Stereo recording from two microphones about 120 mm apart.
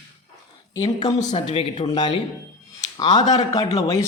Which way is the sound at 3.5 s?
30° left (ahead or behind).